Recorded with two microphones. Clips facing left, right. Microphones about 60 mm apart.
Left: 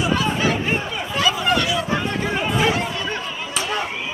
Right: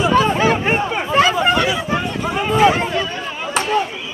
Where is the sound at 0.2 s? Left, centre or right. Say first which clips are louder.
Right 5 dB; right.